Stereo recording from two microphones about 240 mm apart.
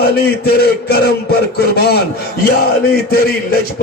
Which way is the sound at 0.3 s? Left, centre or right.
Left.